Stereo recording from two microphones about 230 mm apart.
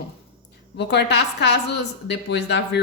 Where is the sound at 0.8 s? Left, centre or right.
Left.